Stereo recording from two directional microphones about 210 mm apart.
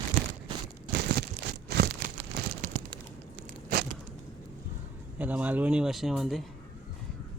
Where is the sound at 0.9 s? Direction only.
50° right (ahead or behind).